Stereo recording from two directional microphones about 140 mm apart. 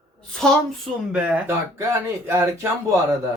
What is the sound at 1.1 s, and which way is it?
Speech, 10° right (ahead or behind).